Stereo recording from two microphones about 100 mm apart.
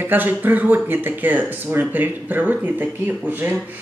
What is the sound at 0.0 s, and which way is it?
A man's voice, 20° right (ahead or behind).